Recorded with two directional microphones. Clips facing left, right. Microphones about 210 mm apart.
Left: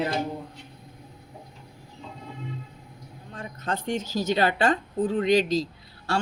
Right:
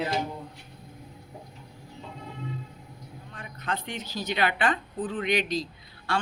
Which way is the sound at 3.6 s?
45° left (ahead or behind).